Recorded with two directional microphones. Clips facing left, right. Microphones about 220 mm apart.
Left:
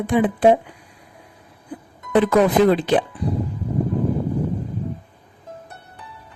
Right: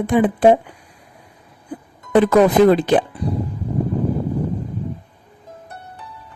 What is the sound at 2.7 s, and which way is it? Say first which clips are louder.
Speech: right 3 dB; 45° right (ahead or behind).